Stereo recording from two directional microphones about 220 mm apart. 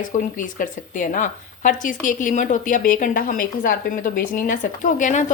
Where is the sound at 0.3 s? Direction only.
35° left (ahead or behind).